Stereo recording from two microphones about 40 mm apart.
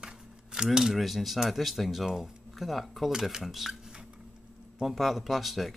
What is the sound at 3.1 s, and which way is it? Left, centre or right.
Speech, centre.